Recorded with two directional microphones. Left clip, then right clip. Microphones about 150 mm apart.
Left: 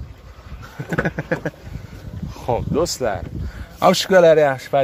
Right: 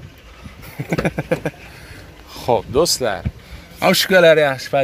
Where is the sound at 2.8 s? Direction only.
10° left (ahead or behind).